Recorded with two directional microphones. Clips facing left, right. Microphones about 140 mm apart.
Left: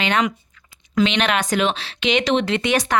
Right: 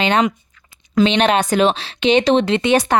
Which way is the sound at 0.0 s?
30° right (ahead or behind).